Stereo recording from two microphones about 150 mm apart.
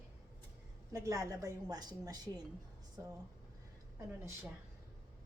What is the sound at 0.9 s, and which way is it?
A woman's voice, 20° right (ahead or behind).